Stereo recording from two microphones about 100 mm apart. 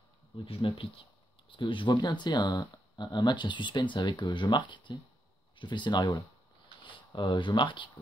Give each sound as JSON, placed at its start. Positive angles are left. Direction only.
{"t": 0.5, "sound": "speech", "side_deg": 65}
{"t": 6.8, "sound": "speech", "side_deg": 50}